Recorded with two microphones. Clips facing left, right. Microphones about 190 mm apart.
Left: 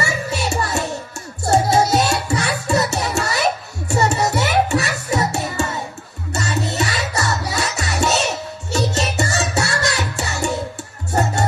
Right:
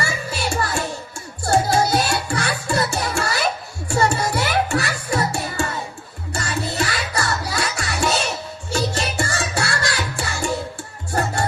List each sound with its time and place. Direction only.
0.3 s music: 25° left (ahead or behind)